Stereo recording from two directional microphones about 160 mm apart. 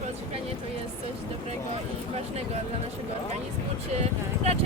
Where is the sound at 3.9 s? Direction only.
45° right (ahead or behind).